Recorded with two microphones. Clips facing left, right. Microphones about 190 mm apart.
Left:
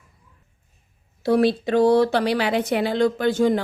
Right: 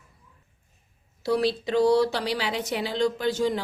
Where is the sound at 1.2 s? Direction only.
55° left (ahead or behind).